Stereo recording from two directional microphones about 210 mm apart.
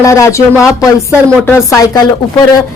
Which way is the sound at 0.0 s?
15° left (ahead or behind).